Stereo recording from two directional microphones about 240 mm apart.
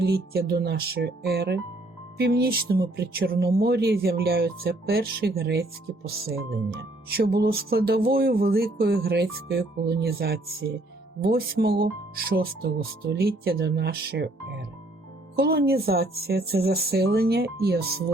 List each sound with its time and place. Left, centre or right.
0.0 s speech: right
15.4 s speech: right